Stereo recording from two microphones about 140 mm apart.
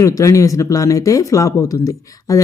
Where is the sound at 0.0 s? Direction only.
25° left (ahead or behind).